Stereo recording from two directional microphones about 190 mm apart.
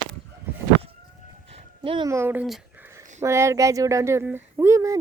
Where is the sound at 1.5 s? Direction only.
25° right (ahead or behind).